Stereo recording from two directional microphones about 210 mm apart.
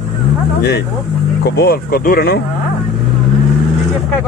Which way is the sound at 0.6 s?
50° left (ahead or behind).